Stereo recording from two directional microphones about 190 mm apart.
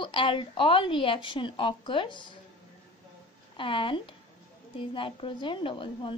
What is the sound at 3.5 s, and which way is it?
A woman's voice, 25° left (ahead or behind).